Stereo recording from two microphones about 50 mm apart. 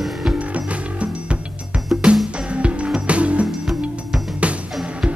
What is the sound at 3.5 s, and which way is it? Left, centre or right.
Music, centre.